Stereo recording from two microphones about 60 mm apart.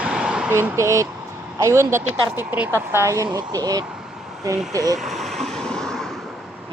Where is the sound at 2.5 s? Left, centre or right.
Right.